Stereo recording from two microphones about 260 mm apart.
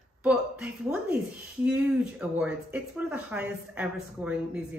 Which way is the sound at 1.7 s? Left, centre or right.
Centre.